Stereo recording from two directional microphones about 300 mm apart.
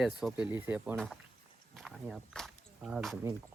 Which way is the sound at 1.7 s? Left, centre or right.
Centre.